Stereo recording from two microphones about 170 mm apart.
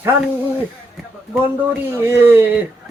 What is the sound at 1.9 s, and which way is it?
Speech, 15° right (ahead or behind).